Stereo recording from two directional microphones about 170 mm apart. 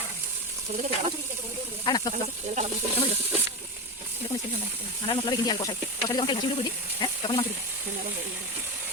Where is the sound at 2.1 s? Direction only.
45° right (ahead or behind).